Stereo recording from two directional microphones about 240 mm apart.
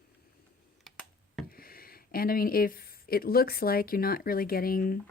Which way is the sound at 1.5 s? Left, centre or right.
Left.